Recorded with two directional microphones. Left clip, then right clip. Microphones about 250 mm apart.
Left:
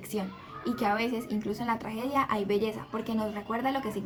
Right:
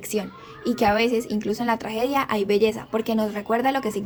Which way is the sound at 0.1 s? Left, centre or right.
Right.